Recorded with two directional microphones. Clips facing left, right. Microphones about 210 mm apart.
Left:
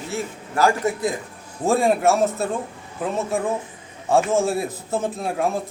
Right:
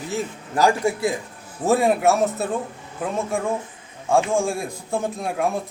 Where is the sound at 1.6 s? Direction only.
Centre (ahead or behind).